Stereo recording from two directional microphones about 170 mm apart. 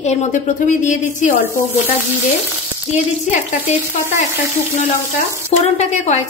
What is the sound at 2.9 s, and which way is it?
Speech, 45° left (ahead or behind).